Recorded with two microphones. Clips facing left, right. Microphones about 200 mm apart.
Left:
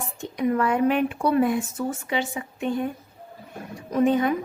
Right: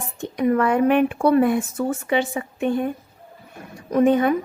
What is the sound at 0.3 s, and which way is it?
A woman's voice, 60° right (ahead or behind).